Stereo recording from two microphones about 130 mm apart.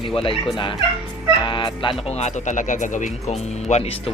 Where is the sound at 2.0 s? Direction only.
55° left (ahead or behind).